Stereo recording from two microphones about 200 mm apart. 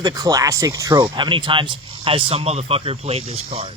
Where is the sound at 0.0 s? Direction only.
20° right (ahead or behind).